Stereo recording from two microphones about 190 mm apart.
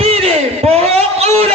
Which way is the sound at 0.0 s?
30° right (ahead or behind).